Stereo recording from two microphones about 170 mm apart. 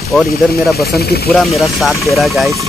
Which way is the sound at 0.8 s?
65° left (ahead or behind).